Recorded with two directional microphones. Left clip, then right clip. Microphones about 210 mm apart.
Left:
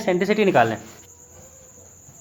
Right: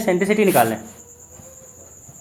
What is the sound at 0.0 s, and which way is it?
Speech, 20° left (ahead or behind).